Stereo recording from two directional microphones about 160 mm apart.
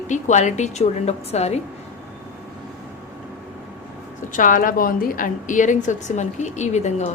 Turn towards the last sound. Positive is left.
turn(degrees=45)  # may be behind; listen again after turning